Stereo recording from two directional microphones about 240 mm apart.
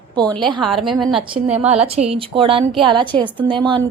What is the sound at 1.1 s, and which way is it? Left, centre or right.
A woman's voice, right.